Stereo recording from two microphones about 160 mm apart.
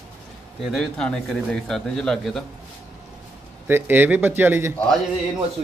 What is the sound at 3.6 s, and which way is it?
Speech, 10° right (ahead or behind).